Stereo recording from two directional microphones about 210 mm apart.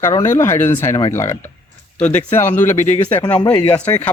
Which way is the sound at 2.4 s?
10° left (ahead or behind).